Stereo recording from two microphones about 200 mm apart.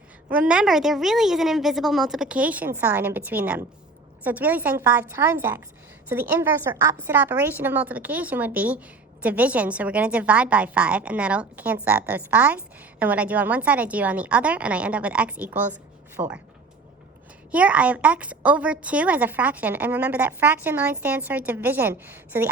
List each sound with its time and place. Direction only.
0.3 s a woman's voice: 5° right (ahead or behind)
17.5 s a woman's voice: 5° right (ahead or behind)